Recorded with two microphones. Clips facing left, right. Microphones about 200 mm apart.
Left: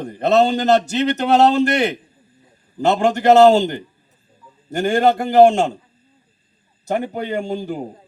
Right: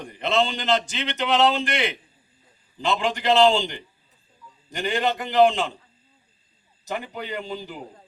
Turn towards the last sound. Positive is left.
turn(degrees=50)  # may be behind; listen again after turning